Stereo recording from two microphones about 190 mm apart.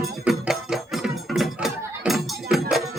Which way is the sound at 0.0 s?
Centre (ahead or behind).